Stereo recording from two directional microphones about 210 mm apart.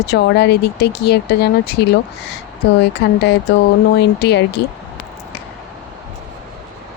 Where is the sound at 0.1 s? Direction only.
50° left (ahead or behind).